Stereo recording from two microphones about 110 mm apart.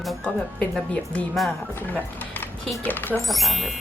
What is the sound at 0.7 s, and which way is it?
A woman's voice, 10° left (ahead or behind).